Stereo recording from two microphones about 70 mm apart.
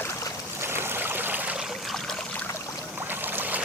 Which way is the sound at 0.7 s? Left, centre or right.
Right.